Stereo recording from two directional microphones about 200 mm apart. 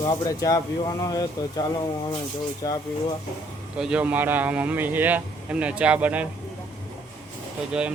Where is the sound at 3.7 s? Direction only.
5° right (ahead or behind).